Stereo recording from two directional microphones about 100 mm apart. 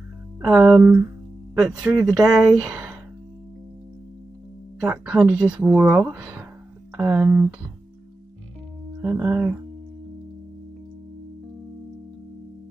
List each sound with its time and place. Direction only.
0.5 s speech: 10° right (ahead or behind)
4.8 s speech: 20° right (ahead or behind)
9.0 s speech: 20° right (ahead or behind)